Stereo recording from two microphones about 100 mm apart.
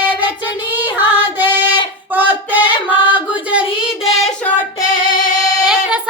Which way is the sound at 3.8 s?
5° right (ahead or behind).